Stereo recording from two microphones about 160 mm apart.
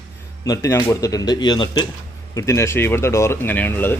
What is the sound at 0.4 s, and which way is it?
Speech, 20° left (ahead or behind).